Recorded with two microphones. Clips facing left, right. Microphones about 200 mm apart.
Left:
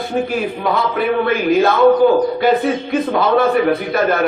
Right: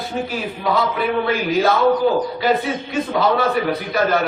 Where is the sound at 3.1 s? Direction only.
55° left (ahead or behind).